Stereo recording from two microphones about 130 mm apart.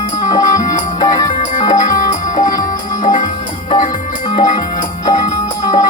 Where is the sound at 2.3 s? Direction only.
90° left.